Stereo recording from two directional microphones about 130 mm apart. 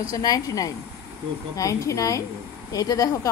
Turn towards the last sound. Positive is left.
turn(degrees=25)  # may be behind; listen again after turning